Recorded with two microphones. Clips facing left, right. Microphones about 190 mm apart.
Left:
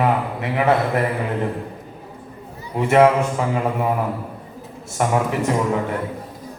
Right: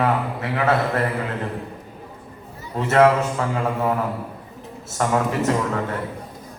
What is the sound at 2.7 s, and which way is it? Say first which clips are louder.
A man's voice: left 2 dB; 15° left (ahead or behind).